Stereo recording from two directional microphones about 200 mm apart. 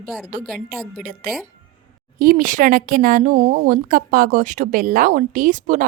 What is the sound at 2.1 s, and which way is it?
A woman's voice, 45° right (ahead or behind).